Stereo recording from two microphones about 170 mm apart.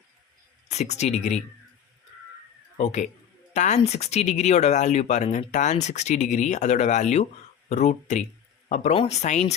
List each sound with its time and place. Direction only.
0.7 s speech: 40° left (ahead or behind)
2.7 s speech: 40° left (ahead or behind)